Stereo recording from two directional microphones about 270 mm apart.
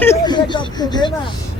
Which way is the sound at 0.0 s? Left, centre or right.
Centre.